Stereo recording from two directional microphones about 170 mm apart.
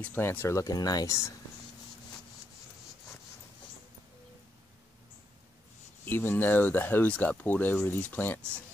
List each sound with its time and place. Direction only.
0.0 s speech: 10° left (ahead or behind)
6.0 s speech: 10° left (ahead or behind)